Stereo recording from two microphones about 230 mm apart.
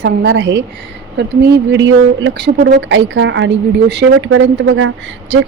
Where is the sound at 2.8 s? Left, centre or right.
Right.